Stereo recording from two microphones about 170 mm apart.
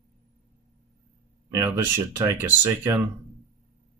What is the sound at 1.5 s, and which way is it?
Speech, 15° right (ahead or behind).